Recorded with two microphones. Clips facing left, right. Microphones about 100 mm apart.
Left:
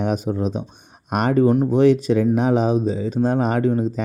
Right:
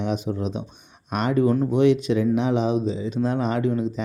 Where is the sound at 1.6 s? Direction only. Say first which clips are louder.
Left 3 dB; 40° left (ahead or behind).